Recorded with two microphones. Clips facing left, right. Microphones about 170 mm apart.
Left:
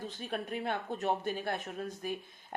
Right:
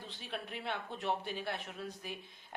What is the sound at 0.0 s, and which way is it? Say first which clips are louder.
Speech: left 6 dB; 45° left (ahead or behind).